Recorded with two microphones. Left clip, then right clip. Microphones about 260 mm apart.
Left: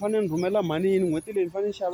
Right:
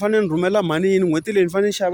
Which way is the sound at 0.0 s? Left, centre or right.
Right.